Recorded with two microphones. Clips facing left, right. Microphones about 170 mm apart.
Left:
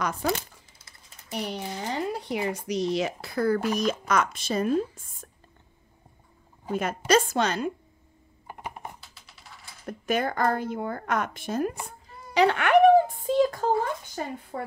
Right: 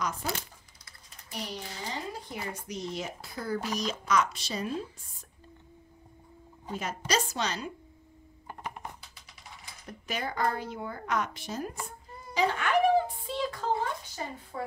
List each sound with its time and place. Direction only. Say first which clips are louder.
1.3 s speech: left 7 dB; 60° left (ahead or behind)
6.7 s speech: left 8 dB; 55° left (ahead or behind)
8.5 s typing: left 2 dB; 10° left (ahead or behind)
9.8 s speech: left 9 dB; 55° left (ahead or behind)
12.4 s a sound: left 7 dB; 65° left (ahead or behind); by 13.7 s 45° left (ahead or behind)
14.2 s speech: left 5 dB; 55° left (ahead or behind)